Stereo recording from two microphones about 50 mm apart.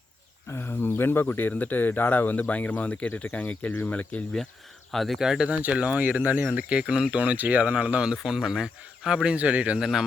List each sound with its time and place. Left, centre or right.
0.4 s a sound: left
0.7 s speech: left
4.9 s speech: centre
5.2 s speech: centre
5.5 s speech: right
6.8 s speech: centre
7.2 s speech: right
8.0 s speech: centre
9.3 s speech: right
9.7 s speech: centre